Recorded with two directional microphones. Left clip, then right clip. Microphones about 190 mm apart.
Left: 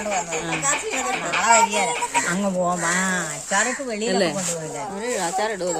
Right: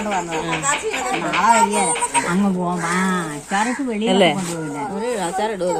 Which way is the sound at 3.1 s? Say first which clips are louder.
Right 1 dB; 55° left (ahead or behind).